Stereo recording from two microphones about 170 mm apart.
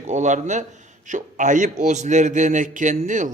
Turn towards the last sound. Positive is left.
turn(degrees=-45)  # may be behind; listen again after turning